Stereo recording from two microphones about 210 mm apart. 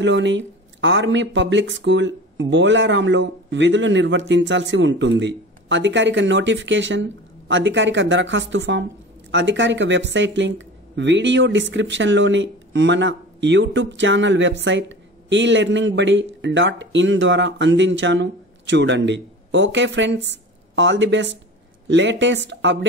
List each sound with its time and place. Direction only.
0.0 s speech: 60° right (ahead or behind)